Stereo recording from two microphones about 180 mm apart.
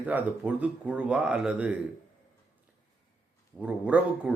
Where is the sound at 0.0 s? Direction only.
10° right (ahead or behind).